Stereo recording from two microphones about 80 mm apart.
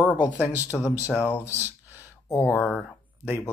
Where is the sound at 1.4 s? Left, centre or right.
Right.